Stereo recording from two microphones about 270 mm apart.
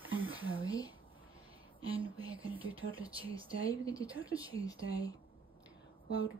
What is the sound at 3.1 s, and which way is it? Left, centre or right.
Speech, centre.